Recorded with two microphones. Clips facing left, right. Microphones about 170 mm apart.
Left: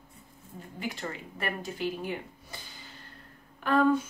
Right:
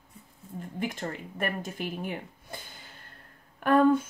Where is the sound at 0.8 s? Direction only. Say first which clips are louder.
Right 3 dB; 50° right (ahead or behind).